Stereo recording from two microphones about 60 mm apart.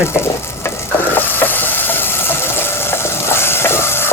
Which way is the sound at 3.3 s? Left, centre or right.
Left.